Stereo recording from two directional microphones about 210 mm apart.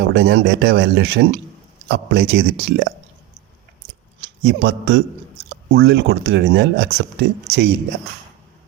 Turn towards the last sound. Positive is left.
turn(degrees=-60)  # may be behind; listen again after turning